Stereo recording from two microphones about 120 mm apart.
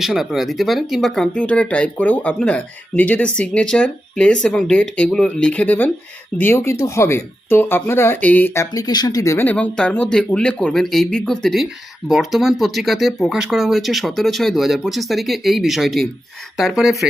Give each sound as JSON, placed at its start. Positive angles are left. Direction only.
{"t": 0.0, "sound": "speech", "side_deg": 0}
{"t": 8.7, "sound": "speech", "side_deg": 35}
{"t": 9.5, "sound": "speech", "side_deg": 10}